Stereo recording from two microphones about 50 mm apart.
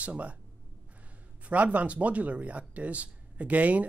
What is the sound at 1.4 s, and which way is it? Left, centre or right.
Speech, right.